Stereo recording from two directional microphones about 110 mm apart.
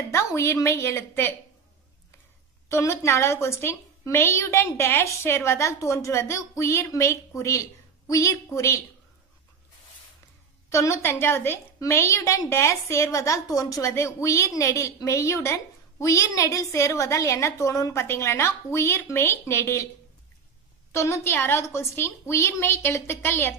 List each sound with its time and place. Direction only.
0.1 s a woman's voice: 25° left (ahead or behind)
2.7 s a woman's voice: 25° left (ahead or behind)
10.7 s a woman's voice: 25° left (ahead or behind)
20.9 s a woman's voice: 25° left (ahead or behind)